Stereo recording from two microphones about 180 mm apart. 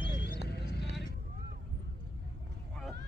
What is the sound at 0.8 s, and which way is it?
Vehicle, 70° left (ahead or behind).